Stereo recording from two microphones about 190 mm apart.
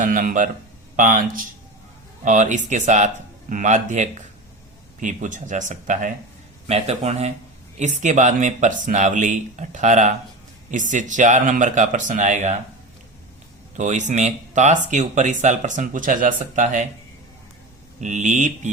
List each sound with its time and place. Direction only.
0.0 s speech: 45° right (ahead or behind)
13.7 s speech: 40° right (ahead or behind)
18.0 s speech: 40° right (ahead or behind)